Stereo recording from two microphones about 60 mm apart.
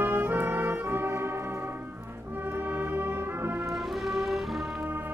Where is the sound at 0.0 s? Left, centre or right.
Right.